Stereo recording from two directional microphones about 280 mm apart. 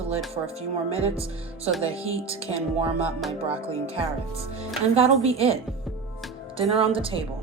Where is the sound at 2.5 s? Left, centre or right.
Right.